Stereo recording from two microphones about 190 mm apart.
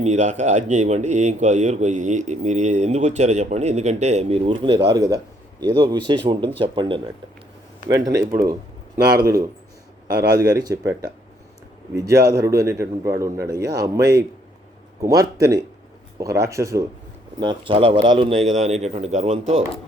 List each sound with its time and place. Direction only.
0.0 s a man's voice: 35° right (ahead or behind)